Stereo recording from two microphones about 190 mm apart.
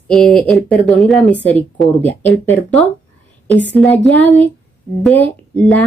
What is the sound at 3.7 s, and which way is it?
A woman's voice, 5° left (ahead or behind).